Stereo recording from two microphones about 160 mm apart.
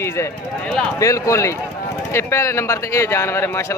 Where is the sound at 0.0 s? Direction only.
15° left (ahead or behind).